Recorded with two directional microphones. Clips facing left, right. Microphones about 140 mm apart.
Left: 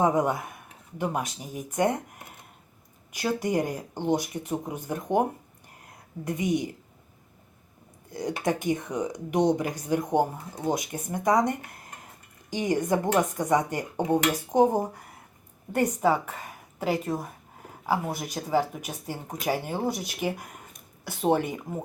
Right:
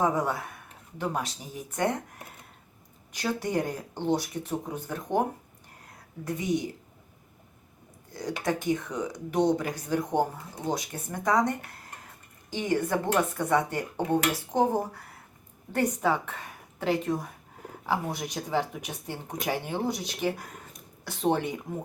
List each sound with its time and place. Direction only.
0.0 s speech: 20° left (ahead or behind)
3.1 s speech: 10° left (ahead or behind)
6.2 s speech: 15° left (ahead or behind)
8.6 s speech: 20° left (ahead or behind)